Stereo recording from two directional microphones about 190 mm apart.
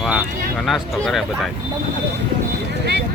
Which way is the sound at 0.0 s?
5° right (ahead or behind).